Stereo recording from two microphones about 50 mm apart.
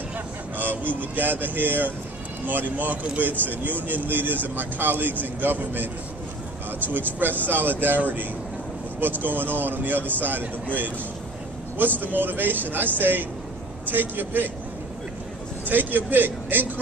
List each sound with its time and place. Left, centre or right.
0.6 s speech: right
6.9 s speech: right
15.7 s speech: right